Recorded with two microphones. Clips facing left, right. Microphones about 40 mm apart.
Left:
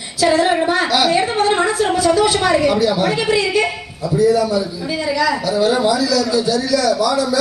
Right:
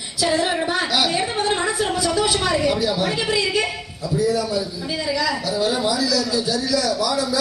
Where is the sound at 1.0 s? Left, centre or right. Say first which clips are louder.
Left 6 dB; left.